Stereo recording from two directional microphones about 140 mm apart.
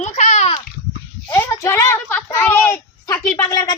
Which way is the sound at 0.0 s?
55° left (ahead or behind).